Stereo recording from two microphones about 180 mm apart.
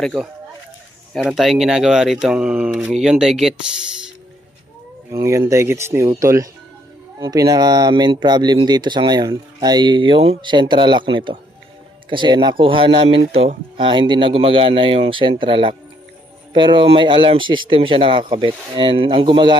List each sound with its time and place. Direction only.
0.0 s speech: 5° right (ahead or behind)
5.1 s speech: 15° right (ahead or behind)